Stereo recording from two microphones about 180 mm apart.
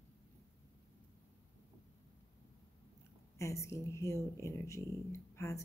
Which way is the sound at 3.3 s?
15° left (ahead or behind).